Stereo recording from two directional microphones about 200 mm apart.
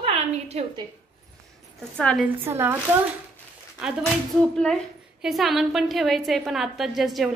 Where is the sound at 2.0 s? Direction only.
5° left (ahead or behind).